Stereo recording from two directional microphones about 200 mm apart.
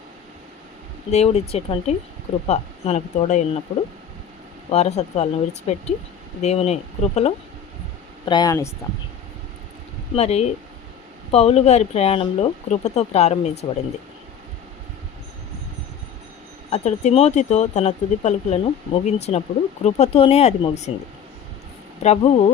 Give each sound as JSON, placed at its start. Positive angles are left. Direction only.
{"t": 1.1, "sound": "speech", "side_deg": 30}
{"t": 4.7, "sound": "speech", "side_deg": 35}
{"t": 8.2, "sound": "speech", "side_deg": 20}
{"t": 10.2, "sound": "speech", "side_deg": 35}
{"t": 16.6, "sound": "speech", "side_deg": 35}
{"t": 22.0, "sound": "speech", "side_deg": 35}